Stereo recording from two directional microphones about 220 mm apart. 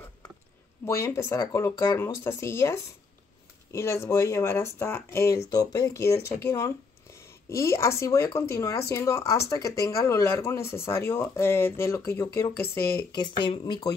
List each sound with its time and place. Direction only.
0.8 s speech: 10° left (ahead or behind)
12.6 s speech: 45° left (ahead or behind)
13.1 s speech: 20° left (ahead or behind)